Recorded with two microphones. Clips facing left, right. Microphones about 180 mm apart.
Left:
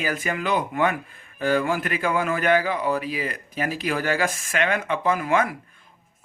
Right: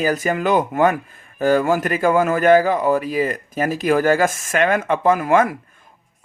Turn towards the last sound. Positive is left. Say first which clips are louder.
# right 6 dB
turn(degrees=-45)  # may be behind; listen again after turning